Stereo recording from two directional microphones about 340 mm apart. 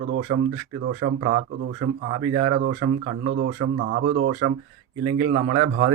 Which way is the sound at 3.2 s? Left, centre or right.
Right.